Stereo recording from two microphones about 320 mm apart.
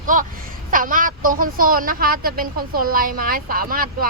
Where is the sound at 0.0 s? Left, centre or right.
Right.